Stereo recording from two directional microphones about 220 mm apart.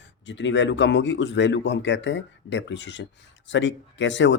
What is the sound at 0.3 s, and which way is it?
Speech, 55° left (ahead or behind).